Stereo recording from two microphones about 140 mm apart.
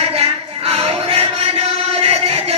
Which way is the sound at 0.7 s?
45° right (ahead or behind).